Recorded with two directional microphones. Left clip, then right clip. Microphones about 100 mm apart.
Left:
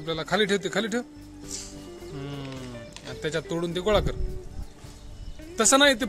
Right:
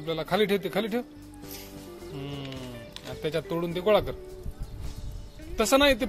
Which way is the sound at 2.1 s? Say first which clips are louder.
Even; 35° left (ahead or behind).